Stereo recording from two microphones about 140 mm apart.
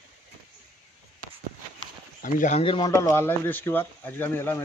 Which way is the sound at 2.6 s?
40° left (ahead or behind).